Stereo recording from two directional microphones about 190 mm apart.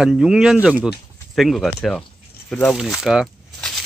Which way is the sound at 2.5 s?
5° left (ahead or behind).